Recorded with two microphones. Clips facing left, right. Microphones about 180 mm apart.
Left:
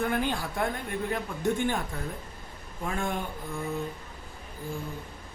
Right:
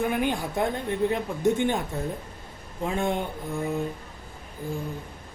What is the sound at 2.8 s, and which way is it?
Speech, 20° right (ahead or behind).